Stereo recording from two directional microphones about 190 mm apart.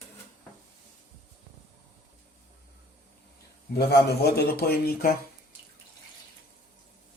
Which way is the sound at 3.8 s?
55° left (ahead or behind).